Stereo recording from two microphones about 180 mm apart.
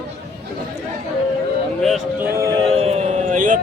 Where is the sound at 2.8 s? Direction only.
35° right (ahead or behind).